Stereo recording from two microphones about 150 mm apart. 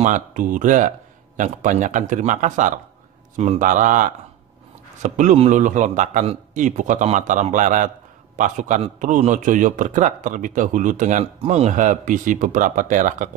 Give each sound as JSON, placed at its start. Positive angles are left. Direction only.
{"t": 0.0, "sound": "speech", "side_deg": -60}